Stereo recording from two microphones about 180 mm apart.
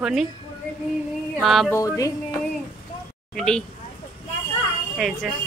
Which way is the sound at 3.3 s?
5° left (ahead or behind).